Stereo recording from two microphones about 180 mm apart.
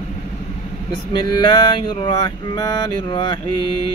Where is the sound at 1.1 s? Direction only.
25° left (ahead or behind).